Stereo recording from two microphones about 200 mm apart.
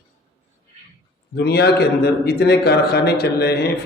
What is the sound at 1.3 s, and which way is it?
A man's voice, 55° left (ahead or behind).